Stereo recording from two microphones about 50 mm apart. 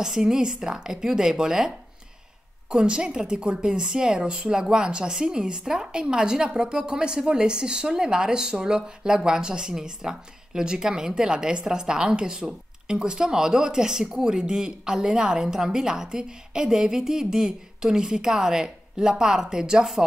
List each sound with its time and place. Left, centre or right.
0.0 s a woman's voice: centre
2.7 s a woman's voice: centre